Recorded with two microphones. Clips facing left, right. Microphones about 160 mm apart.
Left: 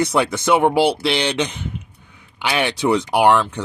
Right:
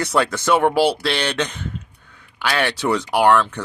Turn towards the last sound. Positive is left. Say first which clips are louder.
# left 1 dB
turn(degrees=15)  # may be behind; listen again after turning